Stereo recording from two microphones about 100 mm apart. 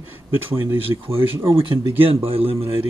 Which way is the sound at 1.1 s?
65° right (ahead or behind).